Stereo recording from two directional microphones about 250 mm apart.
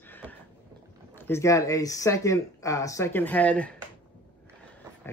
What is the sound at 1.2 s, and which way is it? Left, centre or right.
Speech, centre.